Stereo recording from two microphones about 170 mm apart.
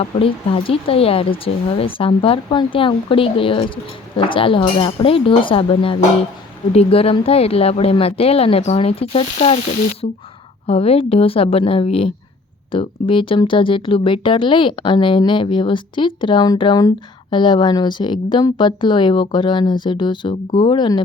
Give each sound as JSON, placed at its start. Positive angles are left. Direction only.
{"t": 0.0, "sound": "speech", "side_deg": 30}
{"t": 10.0, "sound": "speech", "side_deg": 45}